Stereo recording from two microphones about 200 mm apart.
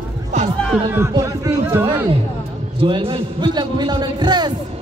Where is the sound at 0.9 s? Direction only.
15° right (ahead or behind).